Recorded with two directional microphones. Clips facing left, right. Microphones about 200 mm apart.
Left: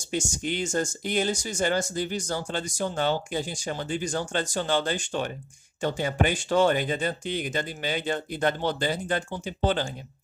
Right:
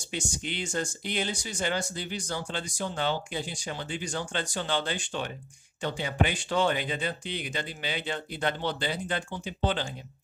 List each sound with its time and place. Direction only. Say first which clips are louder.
0.0 s speech: left 5 dB; 45° left (ahead or behind)